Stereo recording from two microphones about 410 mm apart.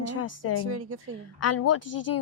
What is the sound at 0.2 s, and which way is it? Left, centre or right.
Speech, left.